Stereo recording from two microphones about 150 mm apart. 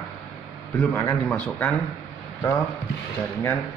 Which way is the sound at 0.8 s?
15° left (ahead or behind).